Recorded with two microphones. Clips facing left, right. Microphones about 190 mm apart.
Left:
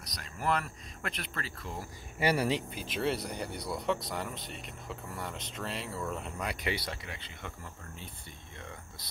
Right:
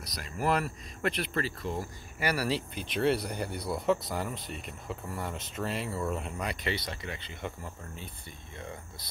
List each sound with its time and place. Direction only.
0.0 s speech: 5° right (ahead or behind)
2.1 s speech: 25° left (ahead or behind)
2.7 s speech: 5° left (ahead or behind)
6.5 s speech: 10° left (ahead or behind)